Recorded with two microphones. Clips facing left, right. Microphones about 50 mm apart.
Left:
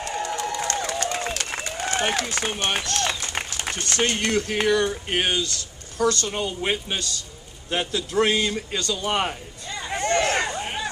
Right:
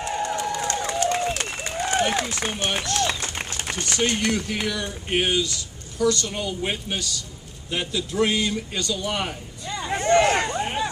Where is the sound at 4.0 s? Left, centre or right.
Left.